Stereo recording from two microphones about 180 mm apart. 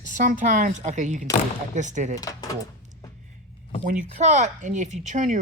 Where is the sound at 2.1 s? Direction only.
20° left (ahead or behind).